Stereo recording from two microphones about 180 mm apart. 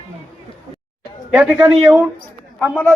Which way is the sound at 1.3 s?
10° right (ahead or behind).